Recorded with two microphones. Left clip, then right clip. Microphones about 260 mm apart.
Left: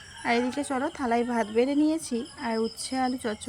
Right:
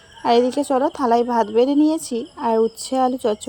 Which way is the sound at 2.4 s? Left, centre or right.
Right.